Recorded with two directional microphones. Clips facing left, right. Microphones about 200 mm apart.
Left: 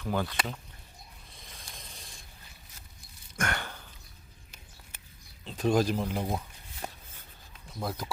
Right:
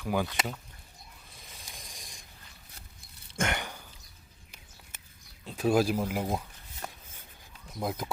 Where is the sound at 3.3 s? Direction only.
20° right (ahead or behind).